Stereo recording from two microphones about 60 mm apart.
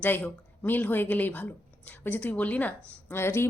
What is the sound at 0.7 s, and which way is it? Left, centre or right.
A woman's voice, left.